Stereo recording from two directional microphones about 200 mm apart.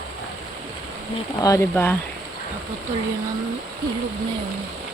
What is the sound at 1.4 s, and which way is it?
Speech, 15° left (ahead or behind).